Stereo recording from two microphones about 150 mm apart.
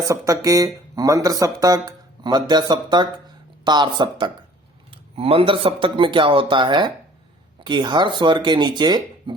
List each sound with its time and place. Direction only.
0.0 s speech: 20° right (ahead or behind)